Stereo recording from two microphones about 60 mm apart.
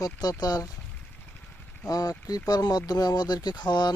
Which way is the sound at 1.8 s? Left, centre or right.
Left.